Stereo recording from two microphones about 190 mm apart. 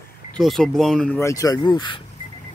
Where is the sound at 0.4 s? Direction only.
Centre (ahead or behind); by 2.0 s 25° left (ahead or behind).